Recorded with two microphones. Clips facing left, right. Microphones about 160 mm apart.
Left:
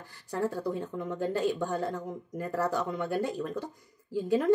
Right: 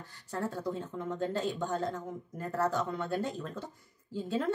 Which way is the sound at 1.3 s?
10° left (ahead or behind).